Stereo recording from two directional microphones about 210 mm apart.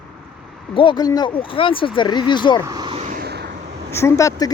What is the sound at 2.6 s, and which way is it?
Speech, 15° right (ahead or behind).